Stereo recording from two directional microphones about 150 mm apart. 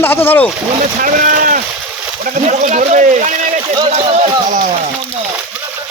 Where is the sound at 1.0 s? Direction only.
65° right (ahead or behind).